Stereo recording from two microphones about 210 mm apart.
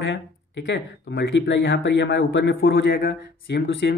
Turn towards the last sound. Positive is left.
turn(degrees=55)  # may be behind; listen again after turning